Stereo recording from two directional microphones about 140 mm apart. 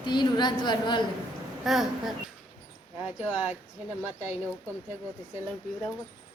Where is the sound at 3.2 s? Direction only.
10° right (ahead or behind).